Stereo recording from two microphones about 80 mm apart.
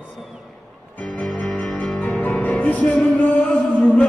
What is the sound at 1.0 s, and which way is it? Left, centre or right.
Music, centre.